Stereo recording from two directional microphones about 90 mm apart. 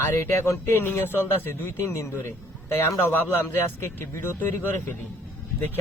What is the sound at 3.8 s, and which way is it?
Speech, 25° left (ahead or behind).